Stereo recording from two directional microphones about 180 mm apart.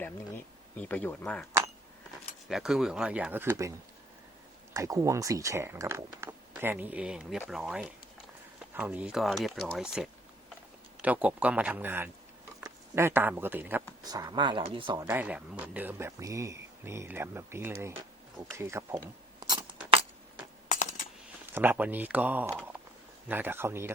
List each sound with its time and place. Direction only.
0.0 s speech: 10° left (ahead or behind)
2.5 s speech: centre (ahead or behind)
4.7 s speech: 15° right (ahead or behind)
14.0 s speech: 20° right (ahead or behind)
15.0 s speech: 10° right (ahead or behind)
21.5 s speech: 10° right (ahead or behind)